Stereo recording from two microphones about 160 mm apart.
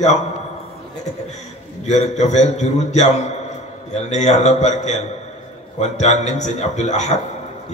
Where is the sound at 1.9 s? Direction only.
45° left (ahead or behind).